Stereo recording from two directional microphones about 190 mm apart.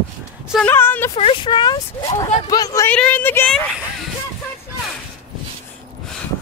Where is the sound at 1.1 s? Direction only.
30° left (ahead or behind).